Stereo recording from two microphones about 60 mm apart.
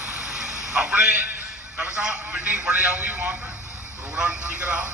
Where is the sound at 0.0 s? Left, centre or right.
Centre.